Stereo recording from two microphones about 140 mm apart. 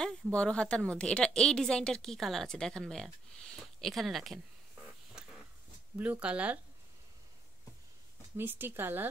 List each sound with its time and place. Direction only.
0.0 s a woman's voice: 5° left (ahead or behind)
5.2 s a sound: 5° right (ahead or behind)
5.9 s speech: 10° right (ahead or behind)
8.4 s speech: 15° right (ahead or behind)